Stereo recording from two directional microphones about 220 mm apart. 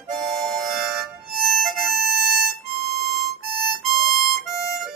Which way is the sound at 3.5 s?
45° right (ahead or behind).